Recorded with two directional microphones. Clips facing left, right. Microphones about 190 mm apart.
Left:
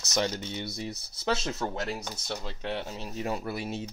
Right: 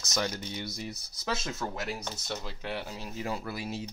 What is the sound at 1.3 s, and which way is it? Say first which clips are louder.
Speech: left 4 dB; 30° left (ahead or behind).